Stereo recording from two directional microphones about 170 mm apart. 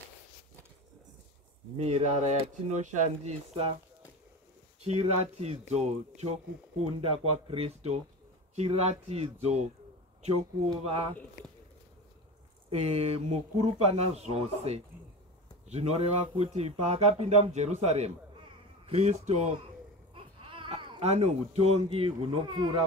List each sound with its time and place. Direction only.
1.8 s speech: 40° right (ahead or behind)
4.8 s speech: 40° right (ahead or behind)
12.6 s speech: 40° right (ahead or behind)
20.2 s a sound: 30° right (ahead or behind)
21.1 s speech: 40° right (ahead or behind); by 22.8 s 25° right (ahead or behind)